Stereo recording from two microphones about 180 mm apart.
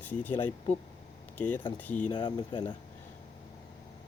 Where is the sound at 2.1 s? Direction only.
25° left (ahead or behind).